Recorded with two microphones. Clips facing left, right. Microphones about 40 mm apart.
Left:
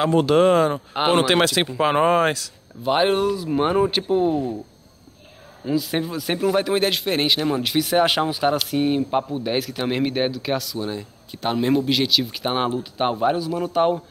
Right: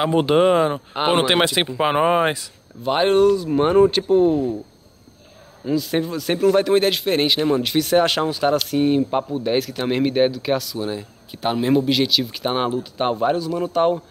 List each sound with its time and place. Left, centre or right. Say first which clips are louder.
0.0 s speech: even; centre
2.8 s speech: right 3 dB; centre
5.7 s speech: right 2 dB; centre